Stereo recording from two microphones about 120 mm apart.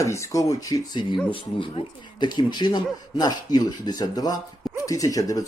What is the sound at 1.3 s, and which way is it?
Speech, 45° left (ahead or behind).